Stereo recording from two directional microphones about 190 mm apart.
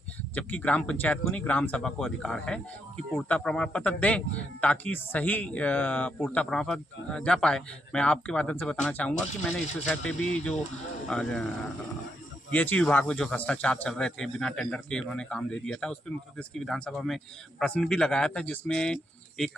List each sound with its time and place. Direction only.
0.3 s speech: 5° left (ahead or behind)
12.5 s speech: 5° left (ahead or behind)